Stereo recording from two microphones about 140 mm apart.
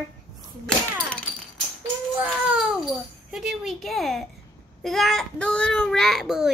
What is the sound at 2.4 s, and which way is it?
A child's voice, 5° right (ahead or behind).